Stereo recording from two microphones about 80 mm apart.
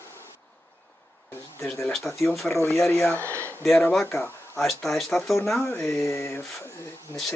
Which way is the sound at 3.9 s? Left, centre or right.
Centre.